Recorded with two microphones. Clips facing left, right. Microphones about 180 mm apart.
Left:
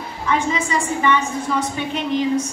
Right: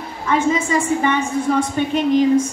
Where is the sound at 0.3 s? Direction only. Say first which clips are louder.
Right 3 dB; 45° right (ahead or behind).